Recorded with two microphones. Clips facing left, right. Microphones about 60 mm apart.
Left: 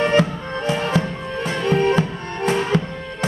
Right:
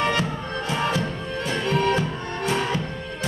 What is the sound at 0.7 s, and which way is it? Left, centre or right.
Music, left.